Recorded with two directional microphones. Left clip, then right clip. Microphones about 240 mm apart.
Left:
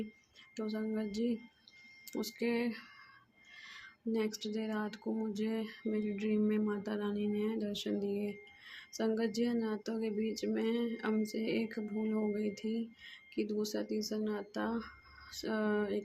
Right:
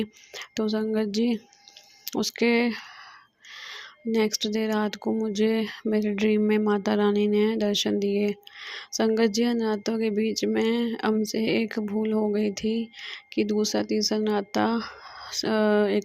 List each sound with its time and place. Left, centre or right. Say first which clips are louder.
0.5 s speech: right 13 dB; right